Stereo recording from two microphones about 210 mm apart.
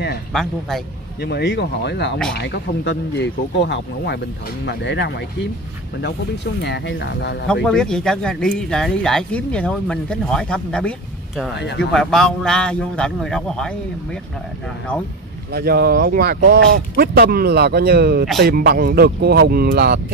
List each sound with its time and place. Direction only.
0.3 s speech: centre (ahead or behind)
1.2 s speech: 55° left (ahead or behind)
6.6 s speech: 55° left (ahead or behind)
7.4 s speech: centre (ahead or behind)
11.5 s speech: 55° left (ahead or behind)
11.9 s speech: centre (ahead or behind)
15.5 s speech: 45° right (ahead or behind)